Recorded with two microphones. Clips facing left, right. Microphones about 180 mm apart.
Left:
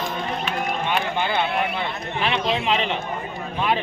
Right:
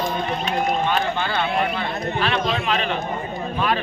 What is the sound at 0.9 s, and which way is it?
A man's voice, 15° left (ahead or behind).